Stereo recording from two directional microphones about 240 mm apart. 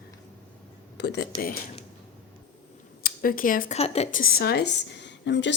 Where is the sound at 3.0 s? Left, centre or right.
Left.